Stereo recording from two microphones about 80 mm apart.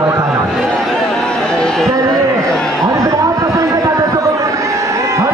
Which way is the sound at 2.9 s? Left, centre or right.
Right.